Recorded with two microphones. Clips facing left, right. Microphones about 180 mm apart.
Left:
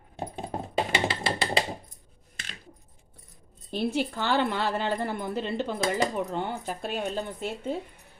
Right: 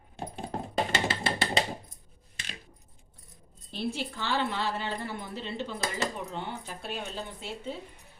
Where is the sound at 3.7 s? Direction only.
55° left (ahead or behind).